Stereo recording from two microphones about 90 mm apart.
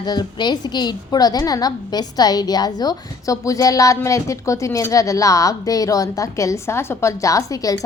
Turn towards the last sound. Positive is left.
turn(degrees=40)  # may be behind; listen again after turning